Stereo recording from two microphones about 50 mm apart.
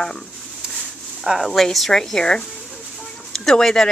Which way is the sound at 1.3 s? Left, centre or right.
Centre.